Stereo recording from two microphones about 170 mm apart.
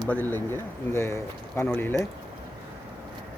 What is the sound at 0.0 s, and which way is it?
Speech, 10° left (ahead or behind).